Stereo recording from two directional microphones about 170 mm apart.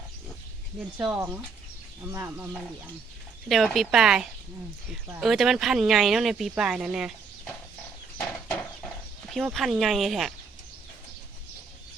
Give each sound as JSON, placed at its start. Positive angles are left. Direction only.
{"t": 0.9, "sound": "speech", "side_deg": -10}
{"t": 3.5, "sound": "speech", "side_deg": 0}
{"t": 9.3, "sound": "speech", "side_deg": 0}